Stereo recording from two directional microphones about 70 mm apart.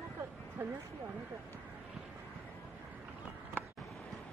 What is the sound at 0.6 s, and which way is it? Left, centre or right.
Speech, right.